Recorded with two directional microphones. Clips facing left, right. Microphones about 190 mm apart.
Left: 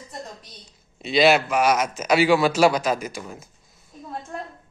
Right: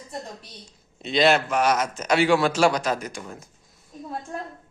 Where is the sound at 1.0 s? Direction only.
10° left (ahead or behind).